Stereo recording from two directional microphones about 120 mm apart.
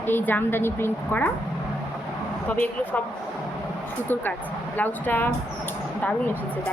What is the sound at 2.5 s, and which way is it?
Speech, 15° left (ahead or behind).